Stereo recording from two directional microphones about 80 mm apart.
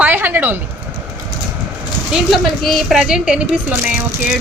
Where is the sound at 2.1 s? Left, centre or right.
Centre.